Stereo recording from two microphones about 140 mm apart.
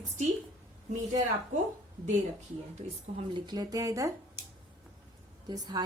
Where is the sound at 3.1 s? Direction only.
45° right (ahead or behind).